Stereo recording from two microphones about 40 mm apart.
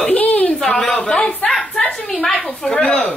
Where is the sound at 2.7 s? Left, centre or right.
Left.